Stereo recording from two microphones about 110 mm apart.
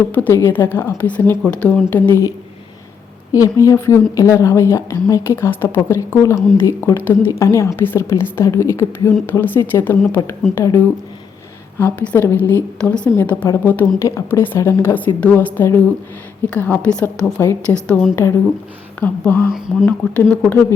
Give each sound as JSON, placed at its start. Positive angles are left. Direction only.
{"t": 0.0, "sound": "a woman's voice", "side_deg": 15}
{"t": 3.3, "sound": "a woman's voice", "side_deg": 30}
{"t": 11.8, "sound": "a woman's voice", "side_deg": 20}
{"t": 17.4, "sound": "a woman's voice", "side_deg": 25}
{"t": 18.9, "sound": "a woman's voice", "side_deg": 15}